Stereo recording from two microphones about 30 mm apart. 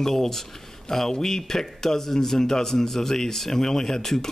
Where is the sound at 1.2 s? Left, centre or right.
Centre.